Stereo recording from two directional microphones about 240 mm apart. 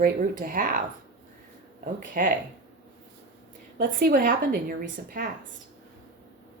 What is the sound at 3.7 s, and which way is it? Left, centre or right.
Speech, right.